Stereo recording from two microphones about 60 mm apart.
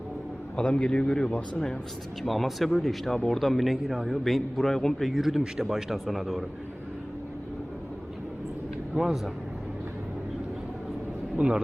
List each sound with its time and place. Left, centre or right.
0.5 s a man's voice: centre
9.0 s a man's voice: centre
11.3 s a man's voice: centre